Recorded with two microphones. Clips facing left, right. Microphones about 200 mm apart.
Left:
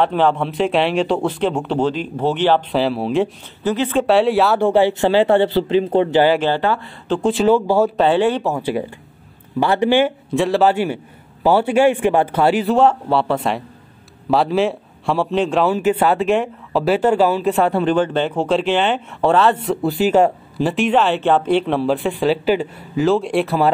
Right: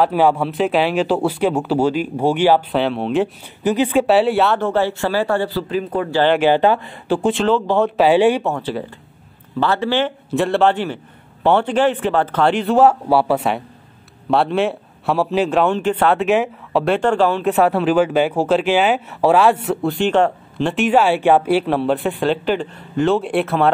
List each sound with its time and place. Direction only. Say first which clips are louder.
0.0 s speech: right 1 dB; 10° right (ahead or behind)
2.7 s speech: even; centre (ahead or behind)
3.6 s speech: right 2 dB; 15° right (ahead or behind)
4.0 s speech: left 2 dB; 5° right (ahead or behind)
4.6 s speech: left 4 dB; 15° left (ahead or behind)
6.4 s speech: right 4 dB; 15° right (ahead or behind)
7.3 s a man's voice: left 2 dB; 10° left (ahead or behind)
8.0 s speech: right 2 dB; 10° right (ahead or behind)
8.5 s a man's voice: left 2 dB; 10° left (ahead or behind)
10.3 s a man's voice: even; centre (ahead or behind)
17.6 s speech: right 3 dB; 5° right (ahead or behind)